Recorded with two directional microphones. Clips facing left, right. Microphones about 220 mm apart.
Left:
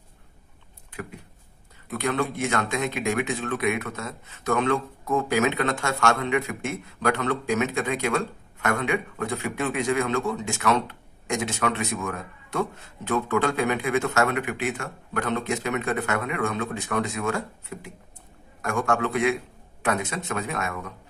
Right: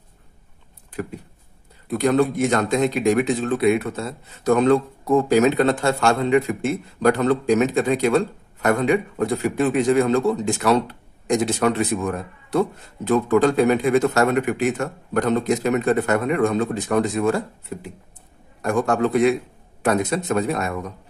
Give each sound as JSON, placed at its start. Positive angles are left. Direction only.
{"t": 1.9, "sound": "speech", "side_deg": -40}